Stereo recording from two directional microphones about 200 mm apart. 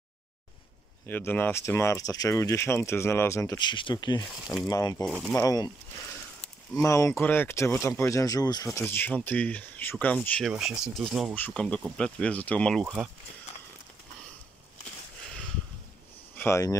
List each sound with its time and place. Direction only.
1.0 s speech: 10° left (ahead or behind)
5.0 s speech: 5° right (ahead or behind)
5.3 s speech: 15° left (ahead or behind)
16.3 s speech: 15° left (ahead or behind)